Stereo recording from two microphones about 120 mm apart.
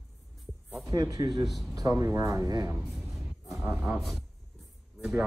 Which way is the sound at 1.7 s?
30° right (ahead or behind).